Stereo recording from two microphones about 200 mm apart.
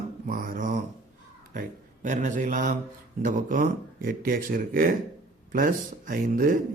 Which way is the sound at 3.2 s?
45° right (ahead or behind).